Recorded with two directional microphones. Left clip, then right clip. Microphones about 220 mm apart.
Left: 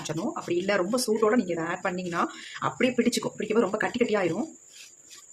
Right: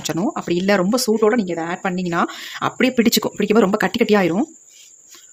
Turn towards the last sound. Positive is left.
turn(degrees=-45)  # may be behind; listen again after turning